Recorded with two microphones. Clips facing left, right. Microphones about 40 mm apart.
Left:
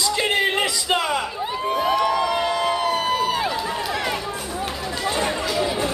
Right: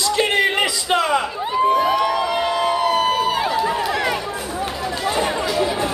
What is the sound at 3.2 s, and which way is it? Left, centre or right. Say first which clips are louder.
Run: right 3 dB; centre.